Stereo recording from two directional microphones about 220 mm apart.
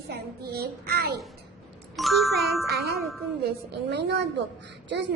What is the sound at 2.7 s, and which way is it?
Speech, 45° right (ahead or behind).